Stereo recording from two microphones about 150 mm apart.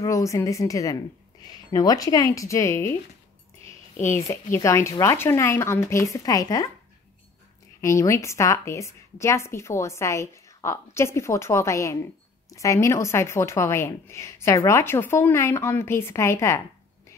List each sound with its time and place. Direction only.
0.0 s a woman's voice: 20° left (ahead or behind)
4.3 s a woman's voice: 20° left (ahead or behind)
7.8 s a woman's voice: 20° left (ahead or behind)